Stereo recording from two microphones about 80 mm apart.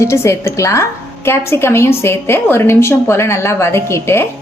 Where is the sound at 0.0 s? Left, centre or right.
Left.